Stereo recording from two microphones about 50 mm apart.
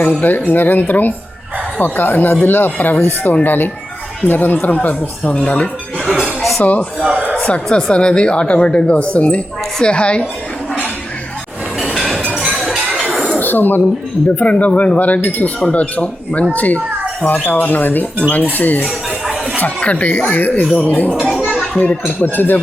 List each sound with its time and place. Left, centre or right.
0.0 s a woman's voice: left
6.1 s music: centre
6.6 s a woman's voice: left
7.0 s a sound: right
7.4 s a woman's voice: left
12.6 s chink: centre
13.4 s speech: left
14.3 s a woman's voice: left
22.2 s speech: left